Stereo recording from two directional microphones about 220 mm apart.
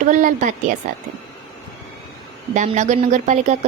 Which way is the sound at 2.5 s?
30° right (ahead or behind).